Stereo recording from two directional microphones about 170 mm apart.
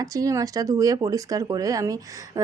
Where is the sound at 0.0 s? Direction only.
20° right (ahead or behind).